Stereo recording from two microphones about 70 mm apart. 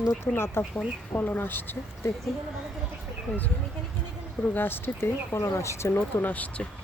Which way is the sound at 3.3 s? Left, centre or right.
Left.